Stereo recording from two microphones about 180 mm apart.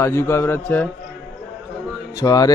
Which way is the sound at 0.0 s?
15° left (ahead or behind).